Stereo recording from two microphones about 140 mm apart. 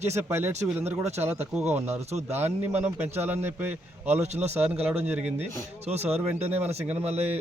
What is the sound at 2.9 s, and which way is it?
Speech, 50° right (ahead or behind).